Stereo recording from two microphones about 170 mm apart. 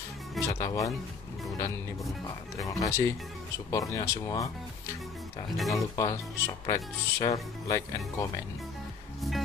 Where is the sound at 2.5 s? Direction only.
20° left (ahead or behind).